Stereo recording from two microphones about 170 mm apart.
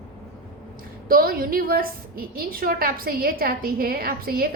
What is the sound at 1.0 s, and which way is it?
A woman's voice, 60° right (ahead or behind).